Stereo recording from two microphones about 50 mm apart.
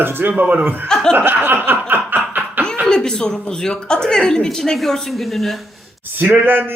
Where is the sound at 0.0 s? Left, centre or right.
Right.